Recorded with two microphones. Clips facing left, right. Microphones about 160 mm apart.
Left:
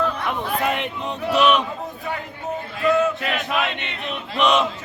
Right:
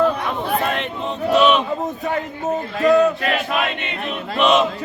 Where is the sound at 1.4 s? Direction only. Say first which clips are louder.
Right 2 dB; 10° left (ahead or behind).